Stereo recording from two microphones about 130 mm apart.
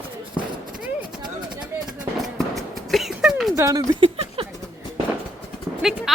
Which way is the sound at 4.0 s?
45° right (ahead or behind).